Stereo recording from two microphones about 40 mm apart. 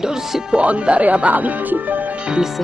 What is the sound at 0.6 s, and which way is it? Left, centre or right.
Speech, right.